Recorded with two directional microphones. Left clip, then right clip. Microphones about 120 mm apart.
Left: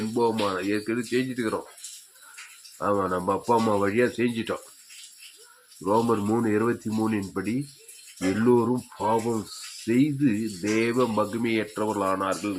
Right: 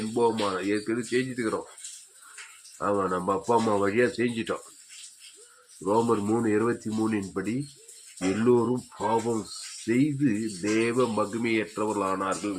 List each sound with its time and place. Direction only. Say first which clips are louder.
0.1 s speech: even; 25° left (ahead or behind)
2.7 s speech: left 1 dB; 25° left (ahead or behind)
5.8 s speech: left 1 dB; 30° left (ahead or behind)